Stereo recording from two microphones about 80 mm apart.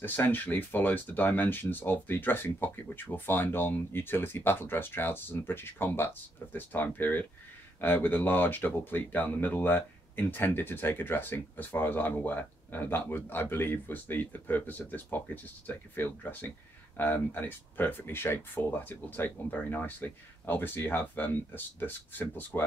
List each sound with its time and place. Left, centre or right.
0.0 s speech: left